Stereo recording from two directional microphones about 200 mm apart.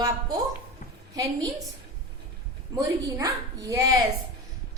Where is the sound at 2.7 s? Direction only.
15° right (ahead or behind).